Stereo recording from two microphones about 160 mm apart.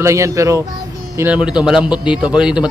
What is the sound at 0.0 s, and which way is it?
Speech, 20° right (ahead or behind).